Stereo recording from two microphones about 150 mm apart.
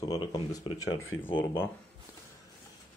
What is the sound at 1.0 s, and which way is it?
Speech, 15° left (ahead or behind).